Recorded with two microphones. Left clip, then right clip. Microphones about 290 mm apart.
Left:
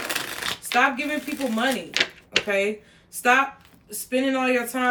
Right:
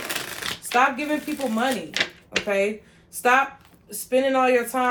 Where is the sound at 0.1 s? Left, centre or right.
Centre.